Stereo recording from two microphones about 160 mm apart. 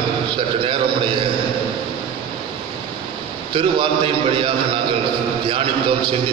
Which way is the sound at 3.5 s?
35° right (ahead or behind).